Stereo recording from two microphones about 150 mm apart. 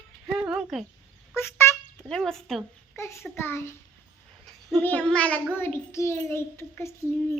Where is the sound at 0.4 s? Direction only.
5° right (ahead or behind).